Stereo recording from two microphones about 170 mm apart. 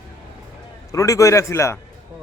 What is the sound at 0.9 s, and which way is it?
Speech, 20° left (ahead or behind).